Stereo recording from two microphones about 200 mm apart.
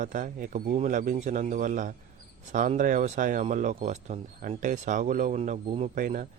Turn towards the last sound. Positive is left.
turn(degrees=-40)  # may be behind; listen again after turning